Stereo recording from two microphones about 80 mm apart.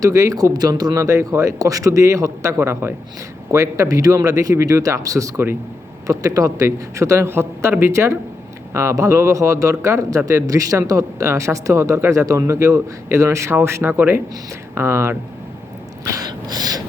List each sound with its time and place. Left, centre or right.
0.0 s speech: right
0.5 s a man's voice: right
16.0 s a sound: right